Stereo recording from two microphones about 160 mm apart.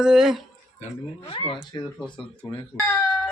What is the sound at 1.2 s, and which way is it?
Speech, 35° left (ahead or behind).